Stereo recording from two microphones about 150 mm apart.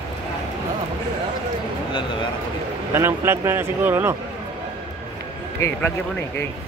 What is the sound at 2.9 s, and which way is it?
Speech, 15° right (ahead or behind).